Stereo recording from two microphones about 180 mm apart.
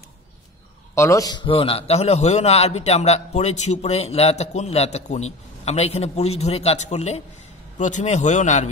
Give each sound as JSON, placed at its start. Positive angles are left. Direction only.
{"t": 0.9, "sound": "a man's voice", "side_deg": 15}